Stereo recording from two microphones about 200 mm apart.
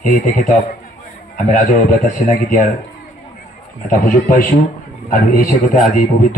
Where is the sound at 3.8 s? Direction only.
40° left (ahead or behind).